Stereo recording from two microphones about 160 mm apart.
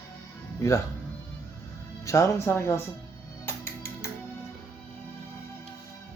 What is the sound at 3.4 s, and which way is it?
Music, 15° left (ahead or behind).